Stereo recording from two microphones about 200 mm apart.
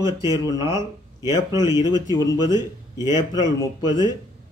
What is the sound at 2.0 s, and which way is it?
Speech, 20° left (ahead or behind).